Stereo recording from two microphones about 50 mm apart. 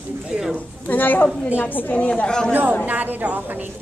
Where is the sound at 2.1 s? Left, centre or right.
Centre.